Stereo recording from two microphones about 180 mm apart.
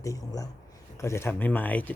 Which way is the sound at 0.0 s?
20° left (ahead or behind).